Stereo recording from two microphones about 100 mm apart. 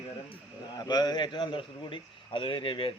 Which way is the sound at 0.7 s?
45° left (ahead or behind).